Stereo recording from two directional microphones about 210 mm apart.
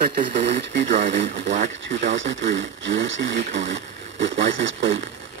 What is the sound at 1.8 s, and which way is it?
Speech, 60° right (ahead or behind).